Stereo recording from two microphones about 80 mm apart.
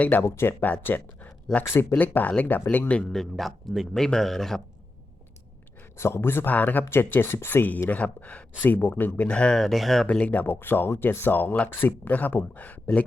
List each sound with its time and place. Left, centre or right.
0.0 s speech: left
3.1 s speech: centre
6.0 s speech: left; by 10.1 s centre
10.1 s speech: centre